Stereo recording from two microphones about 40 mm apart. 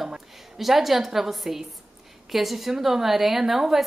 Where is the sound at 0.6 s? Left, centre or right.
Centre.